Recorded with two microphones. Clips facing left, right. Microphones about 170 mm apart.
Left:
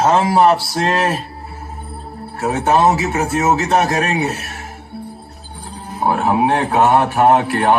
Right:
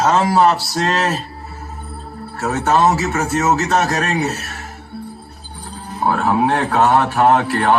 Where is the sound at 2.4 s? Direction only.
25° left (ahead or behind).